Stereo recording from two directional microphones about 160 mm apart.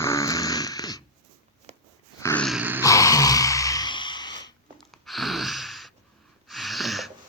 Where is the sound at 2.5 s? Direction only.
10° right (ahead or behind).